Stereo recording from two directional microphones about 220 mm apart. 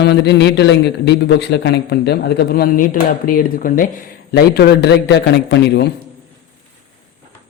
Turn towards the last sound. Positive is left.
turn(degrees=50)  # may be behind; listen again after turning